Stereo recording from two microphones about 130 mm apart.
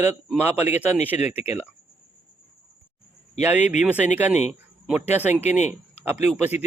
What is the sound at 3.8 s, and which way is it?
Speech, 10° right (ahead or behind).